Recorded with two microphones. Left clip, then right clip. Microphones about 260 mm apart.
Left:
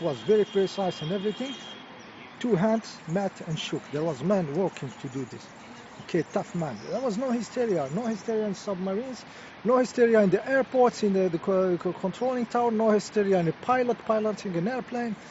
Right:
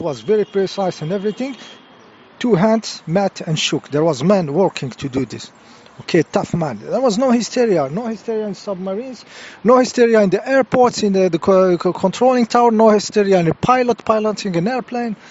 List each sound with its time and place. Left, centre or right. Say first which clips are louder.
0.0 s speech: right 6 dB; right